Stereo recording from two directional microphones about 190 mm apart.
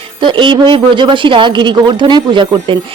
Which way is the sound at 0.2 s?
25° right (ahead or behind).